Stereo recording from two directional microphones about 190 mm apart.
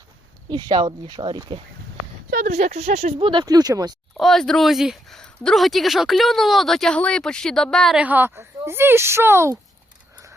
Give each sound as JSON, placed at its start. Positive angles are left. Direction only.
{"t": 0.5, "sound": "speech", "side_deg": -20}
{"t": 2.3, "sound": "speech", "side_deg": -40}
{"t": 4.2, "sound": "speech", "side_deg": 0}